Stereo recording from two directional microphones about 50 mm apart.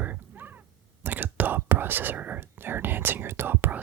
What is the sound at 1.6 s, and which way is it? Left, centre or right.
Whispering, right.